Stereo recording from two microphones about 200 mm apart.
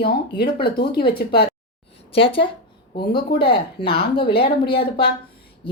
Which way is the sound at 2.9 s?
50° left (ahead or behind).